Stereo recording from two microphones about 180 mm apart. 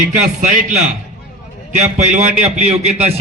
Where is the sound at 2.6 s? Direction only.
40° right (ahead or behind).